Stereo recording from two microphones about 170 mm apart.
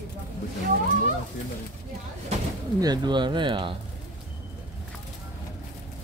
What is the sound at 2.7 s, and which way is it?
Speech, 25° right (ahead or behind).